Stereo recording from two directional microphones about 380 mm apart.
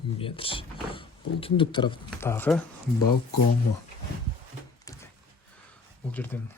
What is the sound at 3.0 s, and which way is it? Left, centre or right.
Speech, left.